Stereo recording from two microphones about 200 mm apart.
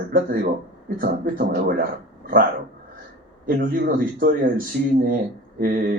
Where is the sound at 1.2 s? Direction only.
45° right (ahead or behind).